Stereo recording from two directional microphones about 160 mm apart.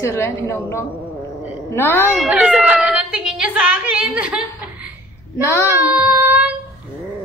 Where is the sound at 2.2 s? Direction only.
Centre (ahead or behind).